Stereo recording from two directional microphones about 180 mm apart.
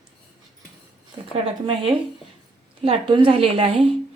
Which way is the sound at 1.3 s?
30° right (ahead or behind).